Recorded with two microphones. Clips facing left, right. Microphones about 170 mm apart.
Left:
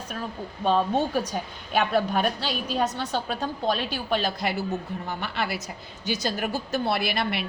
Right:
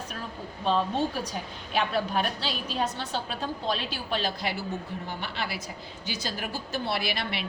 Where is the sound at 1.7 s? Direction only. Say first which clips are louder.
Left 4 dB; 50° left (ahead or behind).